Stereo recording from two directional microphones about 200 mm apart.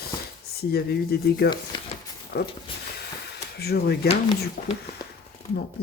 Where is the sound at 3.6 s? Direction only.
55° left (ahead or behind).